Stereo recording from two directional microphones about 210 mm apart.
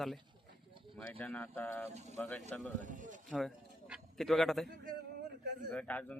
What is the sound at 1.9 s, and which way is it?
Speech, 30° right (ahead or behind).